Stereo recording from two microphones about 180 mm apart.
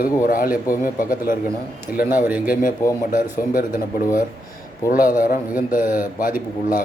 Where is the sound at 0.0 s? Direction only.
50° left (ahead or behind).